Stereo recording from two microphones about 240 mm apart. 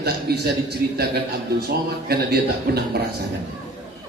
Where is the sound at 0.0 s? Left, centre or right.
Right.